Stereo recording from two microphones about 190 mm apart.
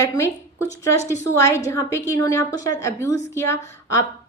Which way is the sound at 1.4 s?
15° left (ahead or behind).